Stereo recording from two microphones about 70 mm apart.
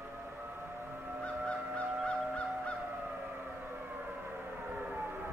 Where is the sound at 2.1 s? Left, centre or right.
Centre.